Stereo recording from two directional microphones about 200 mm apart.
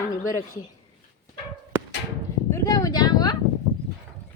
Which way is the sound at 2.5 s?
15° left (ahead or behind).